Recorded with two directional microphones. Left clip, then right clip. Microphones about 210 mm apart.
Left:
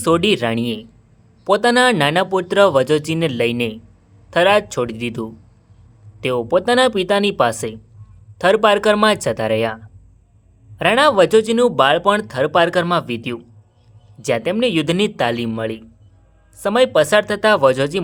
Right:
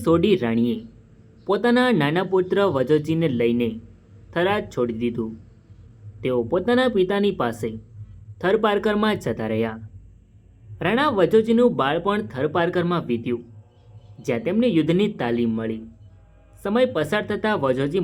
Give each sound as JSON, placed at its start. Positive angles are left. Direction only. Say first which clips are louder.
{"t": 0.0, "sound": "speech", "louder": "left 3 dB", "side_deg": 40}